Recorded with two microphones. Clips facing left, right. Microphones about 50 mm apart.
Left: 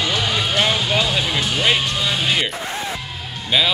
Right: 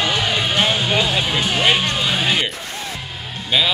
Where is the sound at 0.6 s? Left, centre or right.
Centre.